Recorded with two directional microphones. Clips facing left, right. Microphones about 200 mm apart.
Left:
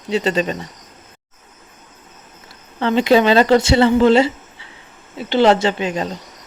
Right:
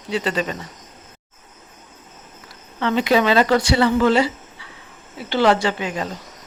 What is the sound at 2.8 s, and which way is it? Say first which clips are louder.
Speech: left 4 dB; 30° left (ahead or behind).